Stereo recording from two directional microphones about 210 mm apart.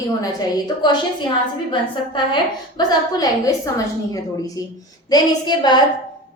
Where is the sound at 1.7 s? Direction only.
20° left (ahead or behind).